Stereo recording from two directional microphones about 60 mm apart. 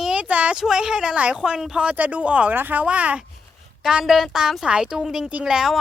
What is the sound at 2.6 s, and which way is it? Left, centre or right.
Speech, right.